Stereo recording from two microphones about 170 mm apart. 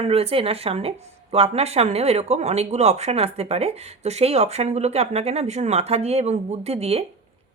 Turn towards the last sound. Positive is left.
turn(degrees=-35)  # may be behind; listen again after turning